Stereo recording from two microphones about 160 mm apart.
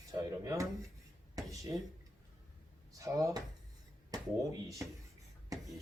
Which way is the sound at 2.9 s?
20° right (ahead or behind).